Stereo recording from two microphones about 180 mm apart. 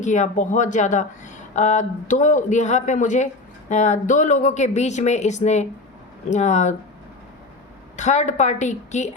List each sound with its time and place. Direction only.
0.0 s speech: 40° left (ahead or behind)
7.9 s speech: 40° left (ahead or behind)